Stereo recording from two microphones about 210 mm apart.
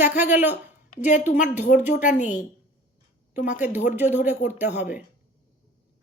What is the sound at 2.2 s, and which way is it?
Speech, 35° left (ahead or behind).